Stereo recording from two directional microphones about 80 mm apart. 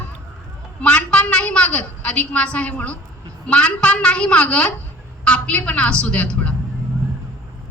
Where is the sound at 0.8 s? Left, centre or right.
Centre.